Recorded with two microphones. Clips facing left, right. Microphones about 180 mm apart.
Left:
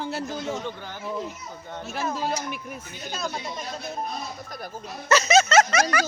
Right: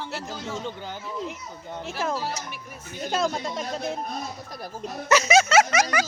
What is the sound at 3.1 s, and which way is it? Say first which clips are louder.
Speech: right 7 dB; 90° right.